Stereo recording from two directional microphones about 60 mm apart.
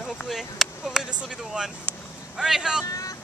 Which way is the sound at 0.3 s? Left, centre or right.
Centre.